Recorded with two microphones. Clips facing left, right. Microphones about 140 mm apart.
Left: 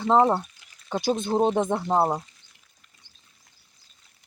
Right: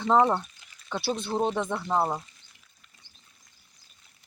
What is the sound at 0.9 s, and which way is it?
Speech, 40° left (ahead or behind).